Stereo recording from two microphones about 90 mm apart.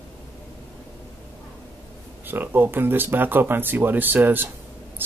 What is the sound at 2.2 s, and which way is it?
Speech, 20° right (ahead or behind).